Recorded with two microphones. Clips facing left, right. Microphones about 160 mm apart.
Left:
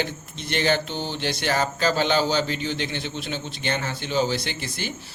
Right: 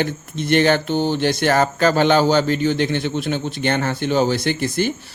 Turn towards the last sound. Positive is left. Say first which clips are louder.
# right 11 dB
turn(degrees=-50)  # may be behind; listen again after turning